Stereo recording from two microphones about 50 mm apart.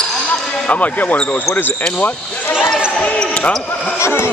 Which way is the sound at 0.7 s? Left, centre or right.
Left.